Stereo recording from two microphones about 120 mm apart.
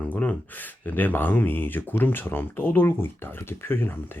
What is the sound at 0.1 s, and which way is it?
Speech, 15° left (ahead or behind).